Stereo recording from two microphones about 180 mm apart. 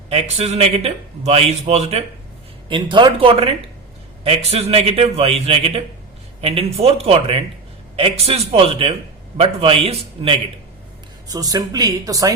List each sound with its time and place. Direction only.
0.1 s a man's voice: 35° right (ahead or behind)
2.6 s a man's voice: 25° right (ahead or behind)
11.3 s speech: 20° right (ahead or behind)